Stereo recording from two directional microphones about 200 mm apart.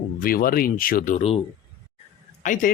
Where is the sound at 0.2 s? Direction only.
45° left (ahead or behind).